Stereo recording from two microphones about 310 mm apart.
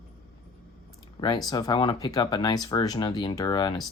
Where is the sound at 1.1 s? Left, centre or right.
Centre.